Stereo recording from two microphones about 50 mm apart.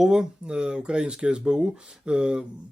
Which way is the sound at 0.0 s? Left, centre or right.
Centre.